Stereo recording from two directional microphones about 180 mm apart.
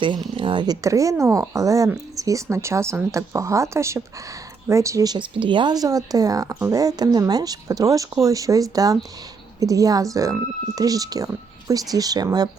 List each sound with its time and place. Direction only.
0.0 s speech: 25° right (ahead or behind)